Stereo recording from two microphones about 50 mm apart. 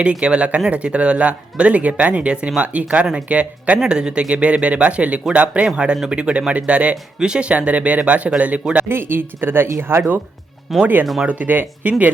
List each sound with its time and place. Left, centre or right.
0.0 s speech: right
3.8 s speech: centre
8.9 s speech: right
10.7 s speech: centre
11.3 s speech: right